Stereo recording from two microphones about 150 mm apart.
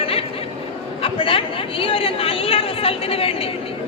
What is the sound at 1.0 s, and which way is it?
Speech, 35° left (ahead or behind).